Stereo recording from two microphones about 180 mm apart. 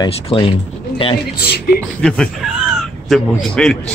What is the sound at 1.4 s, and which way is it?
Speech, 60° left (ahead or behind).